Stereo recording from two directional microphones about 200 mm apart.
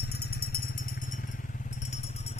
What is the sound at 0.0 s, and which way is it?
Motorcycle, 50° left (ahead or behind).